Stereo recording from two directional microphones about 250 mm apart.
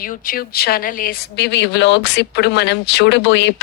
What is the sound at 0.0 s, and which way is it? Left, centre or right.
A woman's voice, left.